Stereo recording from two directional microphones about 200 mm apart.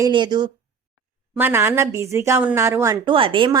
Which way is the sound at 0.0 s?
20° right (ahead or behind).